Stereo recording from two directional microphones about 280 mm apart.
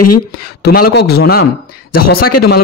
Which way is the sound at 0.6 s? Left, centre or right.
Left.